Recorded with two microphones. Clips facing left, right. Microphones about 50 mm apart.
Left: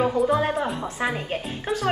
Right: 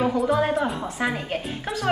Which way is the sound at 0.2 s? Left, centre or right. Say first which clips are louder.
Even; centre.